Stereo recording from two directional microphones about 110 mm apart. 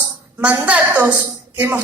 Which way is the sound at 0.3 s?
15° right (ahead or behind).